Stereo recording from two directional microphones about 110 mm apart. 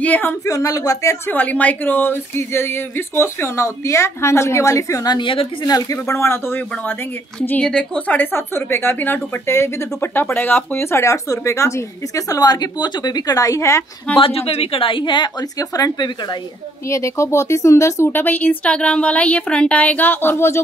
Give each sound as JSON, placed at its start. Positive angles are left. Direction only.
{"t": 0.0, "sound": "speech", "side_deg": 15}
{"t": 0.5, "sound": "a woman's voice", "side_deg": 30}
{"t": 1.3, "sound": "speech", "side_deg": 15}
{"t": 5.7, "sound": "speech", "side_deg": 35}
{"t": 7.3, "sound": "a woman's voice", "side_deg": 10}
{"t": 14.1, "sound": "a woman's voice", "side_deg": 60}
{"t": 16.9, "sound": "speech", "side_deg": 25}